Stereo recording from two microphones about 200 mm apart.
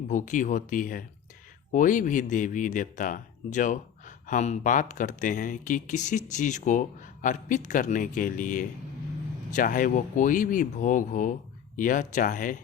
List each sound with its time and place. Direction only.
0.1 s speech: 40° left (ahead or behind)